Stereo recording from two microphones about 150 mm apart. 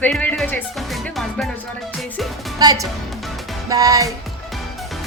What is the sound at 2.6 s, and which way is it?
Speech, 25° right (ahead or behind).